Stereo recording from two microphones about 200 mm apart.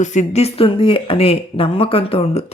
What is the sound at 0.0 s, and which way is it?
Speech, 35° left (ahead or behind).